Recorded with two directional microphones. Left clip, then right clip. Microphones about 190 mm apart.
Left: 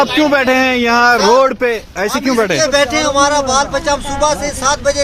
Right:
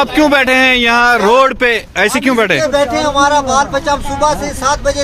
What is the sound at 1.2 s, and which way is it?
Speech, centre (ahead or behind).